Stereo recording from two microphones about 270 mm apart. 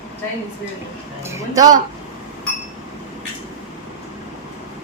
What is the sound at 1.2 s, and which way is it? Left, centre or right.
Speech, centre.